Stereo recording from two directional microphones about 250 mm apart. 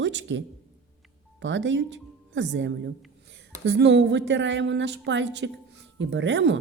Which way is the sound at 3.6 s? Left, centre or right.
Right.